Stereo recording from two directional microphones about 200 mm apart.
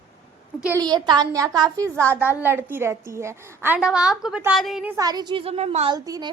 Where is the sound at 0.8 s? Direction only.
20° right (ahead or behind); by 5.0 s 5° right (ahead or behind).